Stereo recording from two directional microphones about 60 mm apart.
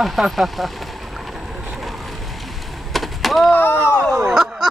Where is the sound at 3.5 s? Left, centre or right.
Left.